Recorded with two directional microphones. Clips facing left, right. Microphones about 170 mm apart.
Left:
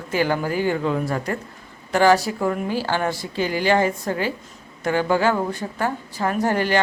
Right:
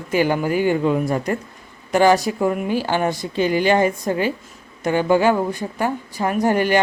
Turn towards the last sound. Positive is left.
turn(degrees=-15)  # may be behind; listen again after turning